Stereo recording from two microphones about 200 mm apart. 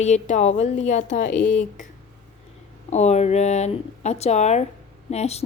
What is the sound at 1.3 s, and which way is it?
Speech, 5° left (ahead or behind).